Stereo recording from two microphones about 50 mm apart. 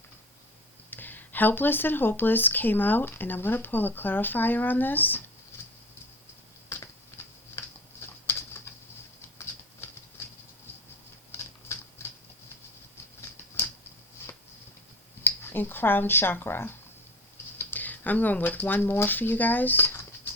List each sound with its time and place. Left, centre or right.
0.9 s speech: left
6.7 s typing: left
8.0 s pigeon: left
11.3 s typewriter: left
15.2 s speech: left
17.7 s speech: left